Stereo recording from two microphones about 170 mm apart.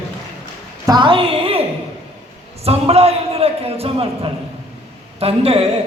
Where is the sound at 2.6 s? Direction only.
35° right (ahead or behind).